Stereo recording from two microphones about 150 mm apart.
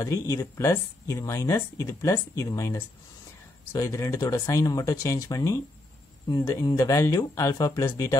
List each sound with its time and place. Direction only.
0.0 s speech: 20° left (ahead or behind)